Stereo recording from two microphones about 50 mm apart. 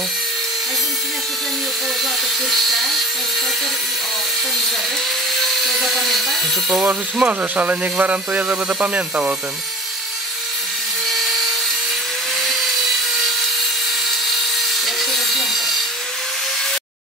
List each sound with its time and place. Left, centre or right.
2.5 s electric shaver: centre
5.4 s dental drill: centre
7.2 s speech: right
14.9 s wood: centre